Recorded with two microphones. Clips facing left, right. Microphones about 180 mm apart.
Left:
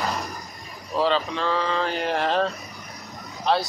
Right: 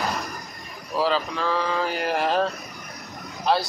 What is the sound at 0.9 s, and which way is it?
Speech, 5° right (ahead or behind).